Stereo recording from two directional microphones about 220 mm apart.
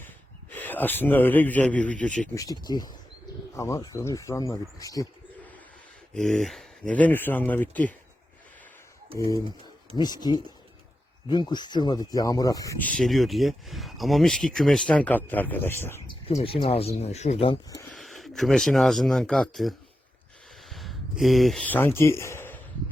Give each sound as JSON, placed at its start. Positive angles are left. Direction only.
{"t": 0.5, "sound": "speech", "side_deg": 10}
{"t": 2.4, "sound": "speech", "side_deg": 15}
{"t": 6.1, "sound": "speech", "side_deg": 0}
{"t": 9.9, "sound": "speech", "side_deg": 20}
{"t": 16.0, "sound": "speech", "side_deg": 25}
{"t": 17.9, "sound": "speech", "side_deg": 0}